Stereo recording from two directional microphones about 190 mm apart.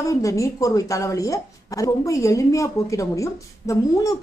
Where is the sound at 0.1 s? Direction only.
15° left (ahead or behind).